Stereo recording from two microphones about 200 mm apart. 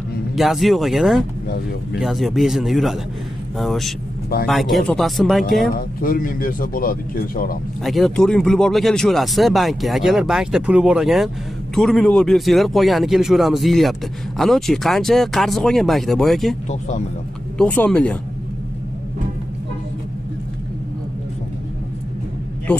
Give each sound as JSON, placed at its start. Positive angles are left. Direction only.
{"t": 0.4, "sound": "speech", "side_deg": 0}
{"t": 5.8, "sound": "speech", "side_deg": 45}
{"t": 7.8, "sound": "speech", "side_deg": 0}
{"t": 17.6, "sound": "speech", "side_deg": 5}